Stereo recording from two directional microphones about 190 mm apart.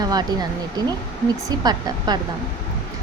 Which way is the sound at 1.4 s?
20° right (ahead or behind).